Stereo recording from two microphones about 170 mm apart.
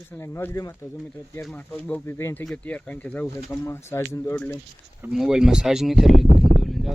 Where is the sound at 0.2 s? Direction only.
15° left (ahead or behind).